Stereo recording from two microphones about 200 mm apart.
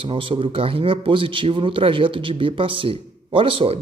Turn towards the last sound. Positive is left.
turn(degrees=-25)  # may be behind; listen again after turning